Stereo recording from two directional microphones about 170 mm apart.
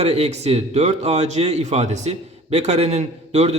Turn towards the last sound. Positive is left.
turn(degrees=-40)  # may be behind; listen again after turning